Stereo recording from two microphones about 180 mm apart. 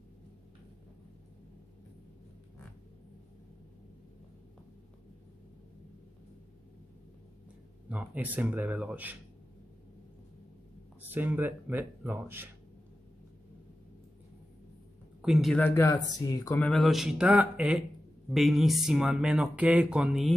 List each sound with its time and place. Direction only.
7.9 s speech: 10° right (ahead or behind)
11.0 s speech: 10° right (ahead or behind)
15.2 s speech: centre (ahead or behind)
15.6 s speech: 15° left (ahead or behind)
16.2 s a sound: 20° left (ahead or behind)
16.5 s speech: 5° left (ahead or behind)